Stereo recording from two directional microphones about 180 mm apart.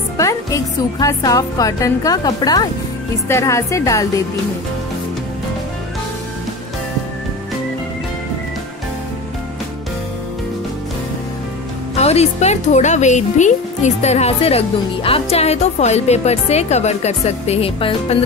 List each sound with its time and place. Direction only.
0.2 s a woman's voice: 20° left (ahead or behind)
11.9 s speech: 35° left (ahead or behind)